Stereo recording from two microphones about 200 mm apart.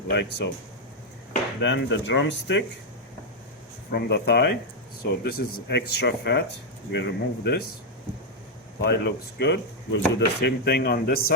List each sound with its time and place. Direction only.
0.1 s speech: 60° left (ahead or behind)
1.6 s speech: 65° left (ahead or behind)
3.9 s speech: 55° left (ahead or behind)
8.8 s speech: 55° left (ahead or behind)